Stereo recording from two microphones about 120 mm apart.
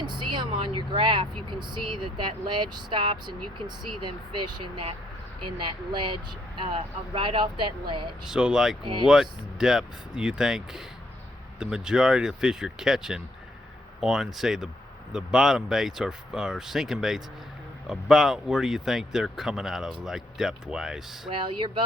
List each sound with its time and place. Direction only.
0.1 s speech: 40° right (ahead or behind)
5.5 s speech: 40° right (ahead or behind)
8.3 s speech: 5° right (ahead or behind)
8.8 s speech: 40° right (ahead or behind)
9.0 s speech: 5° right (ahead or behind)
21.2 s speech: 45° right (ahead or behind)